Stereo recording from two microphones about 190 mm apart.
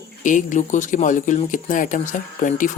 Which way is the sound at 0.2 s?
40° left (ahead or behind).